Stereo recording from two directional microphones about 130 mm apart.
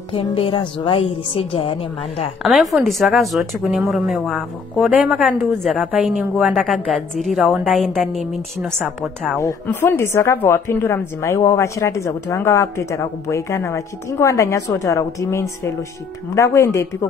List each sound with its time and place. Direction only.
0.1 s a woman's voice: 45° left (ahead or behind)
2.4 s a woman's voice: centre (ahead or behind)
9.4 s a woman's voice: 20° left (ahead or behind)